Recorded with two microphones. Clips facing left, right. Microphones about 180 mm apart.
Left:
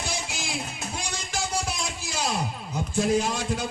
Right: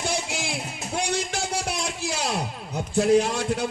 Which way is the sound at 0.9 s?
65° right (ahead or behind).